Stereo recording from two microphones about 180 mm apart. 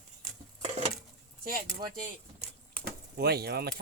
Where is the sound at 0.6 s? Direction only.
40° right (ahead or behind).